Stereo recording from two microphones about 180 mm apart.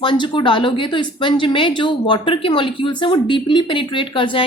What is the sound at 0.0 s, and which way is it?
A woman's voice, 25° left (ahead or behind).